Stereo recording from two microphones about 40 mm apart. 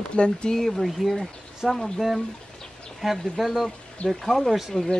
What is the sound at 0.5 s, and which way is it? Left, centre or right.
Speech, centre.